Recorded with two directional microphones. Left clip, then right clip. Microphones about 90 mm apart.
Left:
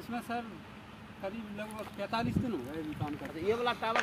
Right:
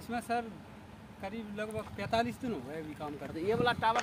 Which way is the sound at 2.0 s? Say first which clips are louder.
Right 3 dB; 30° right (ahead or behind).